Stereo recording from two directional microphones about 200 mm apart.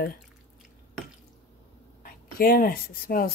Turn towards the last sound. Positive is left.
turn(degrees=50)  # may be behind; listen again after turning